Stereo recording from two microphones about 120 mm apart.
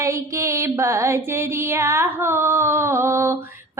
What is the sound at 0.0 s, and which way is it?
Female singing, 25° right (ahead or behind).